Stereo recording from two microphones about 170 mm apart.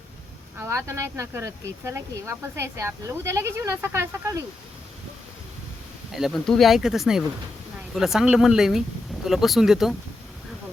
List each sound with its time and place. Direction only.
0.6 s speech: 15° right (ahead or behind)
6.1 s speech: centre (ahead or behind)